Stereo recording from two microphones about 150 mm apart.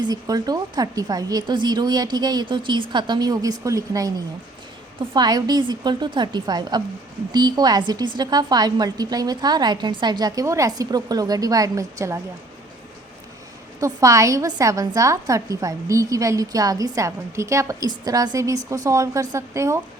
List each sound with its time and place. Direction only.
0.0 s a woman's voice: 25° right (ahead or behind)
5.1 s a woman's voice: 30° right (ahead or behind)
13.7 s a woman's voice: 20° right (ahead or behind)